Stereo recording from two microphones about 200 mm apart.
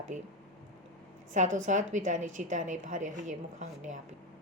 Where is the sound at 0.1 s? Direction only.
40° right (ahead or behind).